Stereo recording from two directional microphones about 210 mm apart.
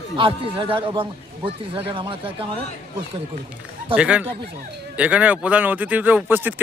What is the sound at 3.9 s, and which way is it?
Speech, 5° right (ahead or behind).